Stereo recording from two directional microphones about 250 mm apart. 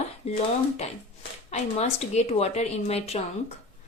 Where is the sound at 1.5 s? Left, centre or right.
Left.